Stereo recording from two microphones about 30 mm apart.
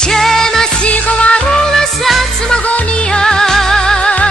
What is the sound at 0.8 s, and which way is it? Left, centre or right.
Music, left.